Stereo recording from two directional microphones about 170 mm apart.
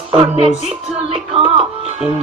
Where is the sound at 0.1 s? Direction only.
35° right (ahead or behind).